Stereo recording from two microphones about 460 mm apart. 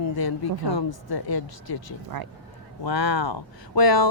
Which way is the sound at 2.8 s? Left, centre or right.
Left.